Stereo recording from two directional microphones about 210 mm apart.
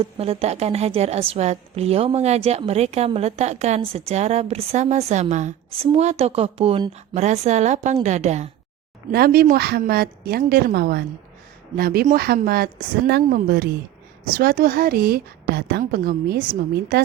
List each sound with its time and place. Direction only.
0.0 s a woman's voice: 30° right (ahead or behind)
9.1 s a woman's voice: 45° right (ahead or behind)